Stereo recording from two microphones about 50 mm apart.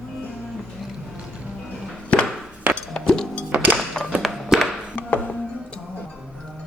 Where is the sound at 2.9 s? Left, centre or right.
Centre.